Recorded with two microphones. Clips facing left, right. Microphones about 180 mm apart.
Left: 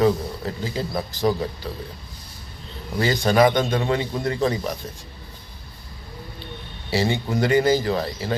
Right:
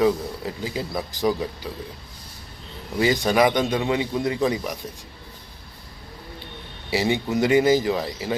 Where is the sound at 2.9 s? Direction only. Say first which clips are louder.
Left 1 dB; 15° right (ahead or behind).